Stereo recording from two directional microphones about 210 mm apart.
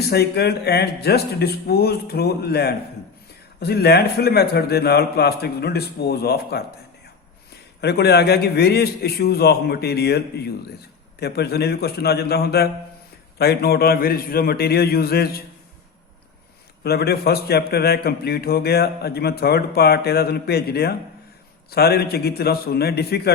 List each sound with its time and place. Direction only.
0.0 s a man's voice: 50° left (ahead or behind)
7.8 s a man's voice: 50° left (ahead or behind)
16.8 s a man's voice: 50° left (ahead or behind)